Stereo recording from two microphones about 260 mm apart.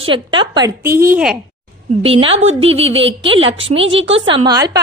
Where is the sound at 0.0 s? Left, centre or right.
Centre.